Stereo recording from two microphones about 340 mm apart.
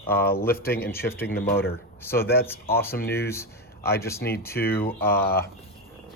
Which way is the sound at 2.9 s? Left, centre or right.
Left.